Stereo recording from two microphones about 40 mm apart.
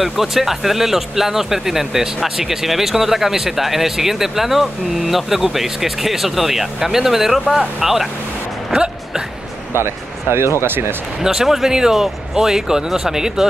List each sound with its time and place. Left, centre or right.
0.0 s speech: centre
8.7 s a sound: right
9.8 s speech: right
11.2 s speech: centre